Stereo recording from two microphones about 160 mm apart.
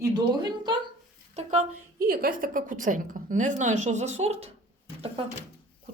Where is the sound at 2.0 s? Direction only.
65° right (ahead or behind); by 4.5 s 40° right (ahead or behind).